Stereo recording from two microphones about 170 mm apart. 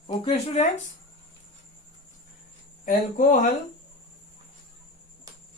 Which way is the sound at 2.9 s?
50° left (ahead or behind).